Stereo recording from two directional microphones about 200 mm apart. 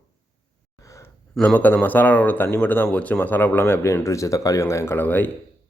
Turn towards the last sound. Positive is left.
turn(degrees=10)  # may be behind; listen again after turning